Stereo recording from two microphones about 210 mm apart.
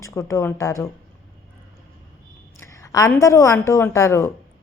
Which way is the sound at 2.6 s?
15° left (ahead or behind).